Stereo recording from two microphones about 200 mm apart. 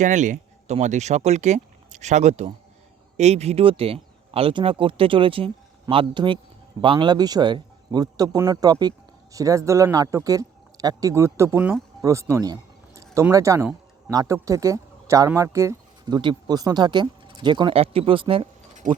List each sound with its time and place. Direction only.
0.0 s speech: 40° right (ahead or behind)
18.8 s speech: 40° right (ahead or behind)